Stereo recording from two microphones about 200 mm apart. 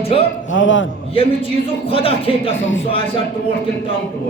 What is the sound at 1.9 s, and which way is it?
Music, 25° left (ahead or behind).